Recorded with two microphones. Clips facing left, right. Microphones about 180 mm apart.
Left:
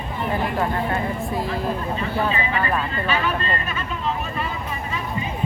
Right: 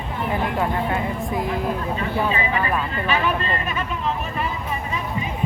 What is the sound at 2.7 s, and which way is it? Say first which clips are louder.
Speech: even; 15° right (ahead or behind).